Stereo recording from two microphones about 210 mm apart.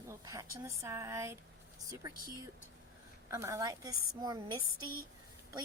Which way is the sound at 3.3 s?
15° right (ahead or behind).